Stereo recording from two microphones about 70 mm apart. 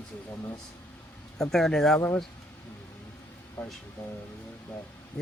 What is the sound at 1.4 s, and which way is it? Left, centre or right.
Speech, centre.